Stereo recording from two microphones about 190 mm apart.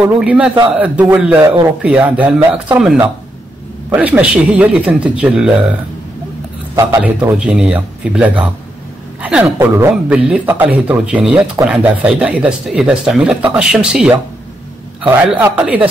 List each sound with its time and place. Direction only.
0.0 s speech: 5° right (ahead or behind)
6.7 s a man's voice: 15° right (ahead or behind)
7.0 s speech: 5° right (ahead or behind)
15.0 s a man's voice: 20° right (ahead or behind)
15.5 s speech: 5° right (ahead or behind)